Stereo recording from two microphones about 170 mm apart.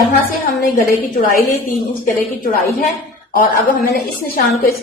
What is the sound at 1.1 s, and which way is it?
Speech, 60° left (ahead or behind).